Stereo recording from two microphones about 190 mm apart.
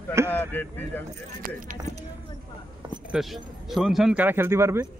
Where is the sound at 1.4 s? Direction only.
45° right (ahead or behind).